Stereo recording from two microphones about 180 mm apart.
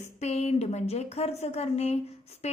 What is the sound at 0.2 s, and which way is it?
A woman's voice, 35° left (ahead or behind).